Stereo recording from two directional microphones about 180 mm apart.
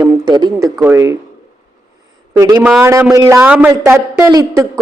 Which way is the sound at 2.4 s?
15° right (ahead or behind).